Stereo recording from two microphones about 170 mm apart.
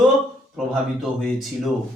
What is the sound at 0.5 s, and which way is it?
Speech, centre (ahead or behind).